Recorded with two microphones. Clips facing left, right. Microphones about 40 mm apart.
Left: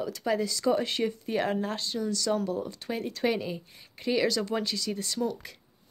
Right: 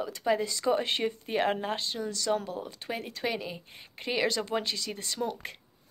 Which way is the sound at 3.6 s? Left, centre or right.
Right.